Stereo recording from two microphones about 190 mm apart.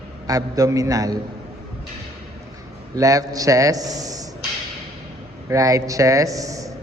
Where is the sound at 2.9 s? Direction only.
20° right (ahead or behind).